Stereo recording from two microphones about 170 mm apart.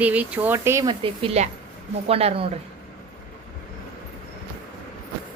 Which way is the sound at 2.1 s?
35° right (ahead or behind).